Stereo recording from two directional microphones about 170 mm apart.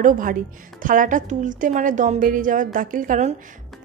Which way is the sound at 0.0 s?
55° right (ahead or behind).